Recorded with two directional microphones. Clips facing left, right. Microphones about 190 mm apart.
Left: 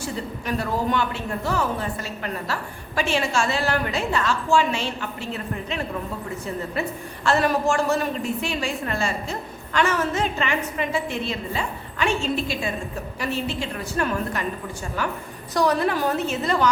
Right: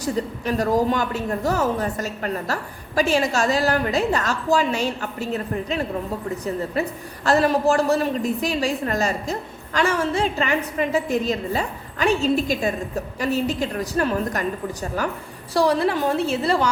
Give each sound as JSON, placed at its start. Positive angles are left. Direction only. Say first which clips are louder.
{"t": 0.0, "sound": "a woman's voice", "louder": "right 5 dB", "side_deg": -40}
{"t": 15.5, "sound": "a woman's voice", "louder": "right 2 dB", "side_deg": -30}